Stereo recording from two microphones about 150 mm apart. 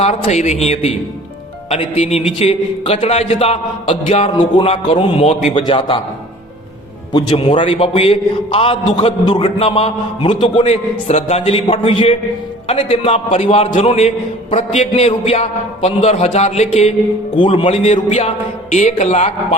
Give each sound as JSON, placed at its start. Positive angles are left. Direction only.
{"t": 0.0, "sound": "a man's voice", "side_deg": 50}
{"t": 4.4, "sound": "a man's voice", "side_deg": 30}
{"t": 7.3, "sound": "a man's voice", "side_deg": 45}
{"t": 7.5, "sound": "a man's voice", "side_deg": 35}
{"t": 10.7, "sound": "a man's voice", "side_deg": 45}
{"t": 17.3, "sound": "a man's voice", "side_deg": 35}